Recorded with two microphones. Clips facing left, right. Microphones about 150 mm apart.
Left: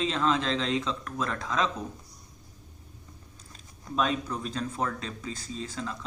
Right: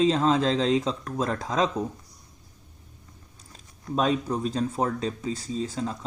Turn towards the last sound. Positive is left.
turn(degrees=-30)  # may be behind; listen again after turning